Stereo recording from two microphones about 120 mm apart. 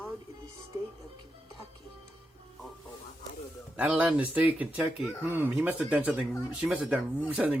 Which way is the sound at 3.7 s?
15° right (ahead or behind).